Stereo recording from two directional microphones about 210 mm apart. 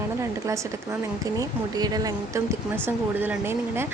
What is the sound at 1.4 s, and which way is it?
Speech, 20° right (ahead or behind).